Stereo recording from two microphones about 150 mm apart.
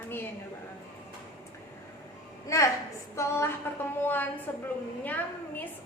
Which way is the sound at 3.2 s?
15° left (ahead or behind).